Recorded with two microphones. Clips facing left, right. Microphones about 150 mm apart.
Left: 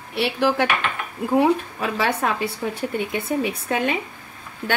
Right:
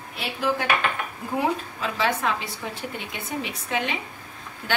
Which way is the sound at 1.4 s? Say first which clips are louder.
Left 5 dB; 60° left (ahead or behind).